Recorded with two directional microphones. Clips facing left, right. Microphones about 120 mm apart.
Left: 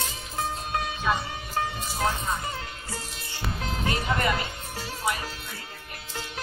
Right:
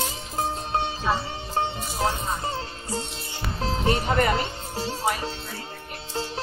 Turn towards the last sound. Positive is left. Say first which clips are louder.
# right 6 dB
turn(degrees=-30)  # may be behind; listen again after turning